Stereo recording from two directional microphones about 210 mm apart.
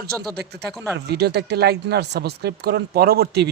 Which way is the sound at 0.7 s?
Centre (ahead or behind).